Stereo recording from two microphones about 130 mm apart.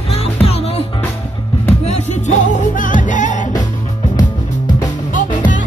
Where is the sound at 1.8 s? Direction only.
60° left (ahead or behind).